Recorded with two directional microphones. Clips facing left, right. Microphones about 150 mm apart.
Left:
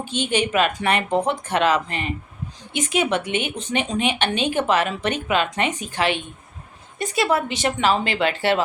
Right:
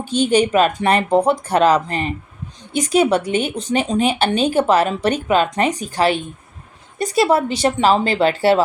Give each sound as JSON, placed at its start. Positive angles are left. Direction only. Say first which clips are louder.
{"t": 0.0, "sound": "a woman's voice", "louder": "right 7 dB", "side_deg": -35}